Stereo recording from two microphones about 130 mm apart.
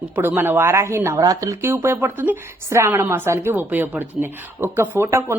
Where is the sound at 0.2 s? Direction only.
15° right (ahead or behind).